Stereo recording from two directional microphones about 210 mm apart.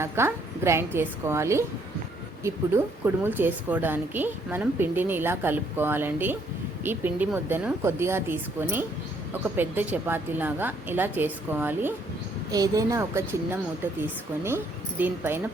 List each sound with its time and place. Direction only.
0.0 s speech: 10° right (ahead or behind)